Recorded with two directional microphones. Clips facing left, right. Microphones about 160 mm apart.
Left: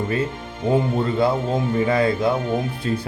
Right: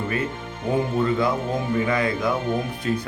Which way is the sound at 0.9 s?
30° left (ahead or behind).